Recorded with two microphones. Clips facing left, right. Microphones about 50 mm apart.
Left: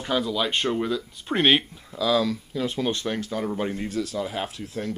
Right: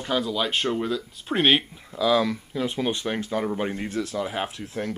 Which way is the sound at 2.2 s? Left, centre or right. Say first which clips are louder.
Even; right.